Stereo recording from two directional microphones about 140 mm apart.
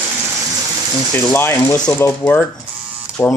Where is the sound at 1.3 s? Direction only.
15° left (ahead or behind).